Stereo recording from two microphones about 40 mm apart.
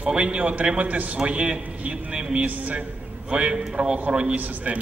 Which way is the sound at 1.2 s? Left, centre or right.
Right.